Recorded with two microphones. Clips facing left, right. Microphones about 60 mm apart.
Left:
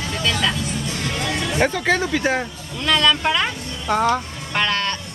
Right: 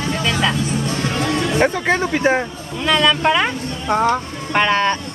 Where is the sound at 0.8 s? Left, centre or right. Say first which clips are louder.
Right 5 dB; right.